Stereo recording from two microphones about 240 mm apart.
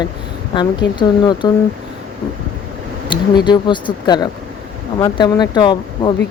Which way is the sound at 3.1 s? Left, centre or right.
Centre.